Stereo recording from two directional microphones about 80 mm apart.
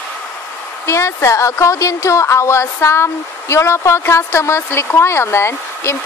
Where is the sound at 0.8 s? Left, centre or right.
Left.